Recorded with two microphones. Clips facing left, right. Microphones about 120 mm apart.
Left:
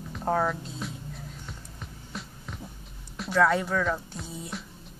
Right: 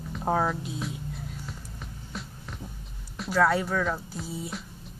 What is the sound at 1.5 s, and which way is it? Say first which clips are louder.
Hum: right 2 dB; centre (ahead or behind).